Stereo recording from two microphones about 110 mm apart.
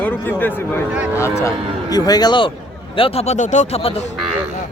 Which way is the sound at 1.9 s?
35° left (ahead or behind).